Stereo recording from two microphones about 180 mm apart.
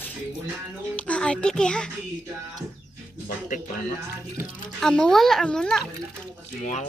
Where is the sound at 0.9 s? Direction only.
5° left (ahead or behind).